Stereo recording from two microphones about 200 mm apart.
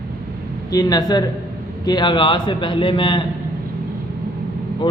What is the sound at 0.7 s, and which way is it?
A man's voice, 20° left (ahead or behind).